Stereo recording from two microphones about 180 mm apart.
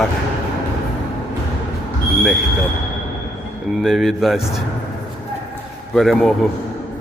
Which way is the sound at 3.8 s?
Centre (ahead or behind).